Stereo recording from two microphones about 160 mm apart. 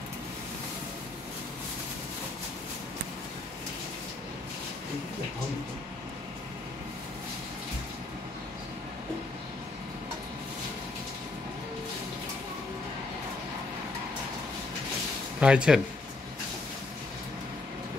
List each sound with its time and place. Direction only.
15.4 s speech: 5° right (ahead or behind)